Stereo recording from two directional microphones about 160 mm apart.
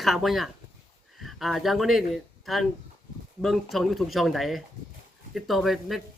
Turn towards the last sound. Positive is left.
turn(degrees=0)  # may be behind; listen again after turning